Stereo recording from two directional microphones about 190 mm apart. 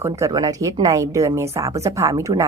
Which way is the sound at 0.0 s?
20° right (ahead or behind).